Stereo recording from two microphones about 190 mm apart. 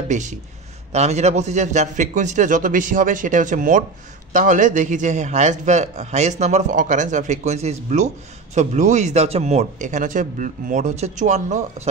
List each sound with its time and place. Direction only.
0.1 s a man's voice: 40° right (ahead or behind)